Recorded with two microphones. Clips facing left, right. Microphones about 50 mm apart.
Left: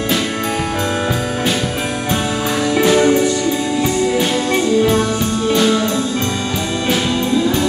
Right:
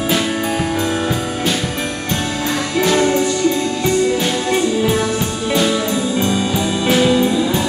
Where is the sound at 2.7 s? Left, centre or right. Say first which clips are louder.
Left 3 dB; centre.